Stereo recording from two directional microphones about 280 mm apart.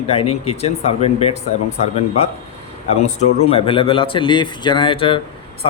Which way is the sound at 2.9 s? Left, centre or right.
Left.